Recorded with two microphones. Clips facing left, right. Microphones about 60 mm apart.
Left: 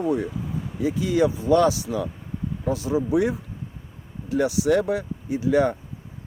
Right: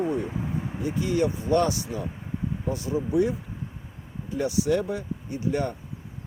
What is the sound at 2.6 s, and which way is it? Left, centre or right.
Speech, left.